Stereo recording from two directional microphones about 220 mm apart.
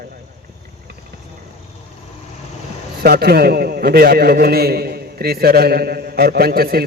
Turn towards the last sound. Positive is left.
turn(degrees=-45)  # may be behind; listen again after turning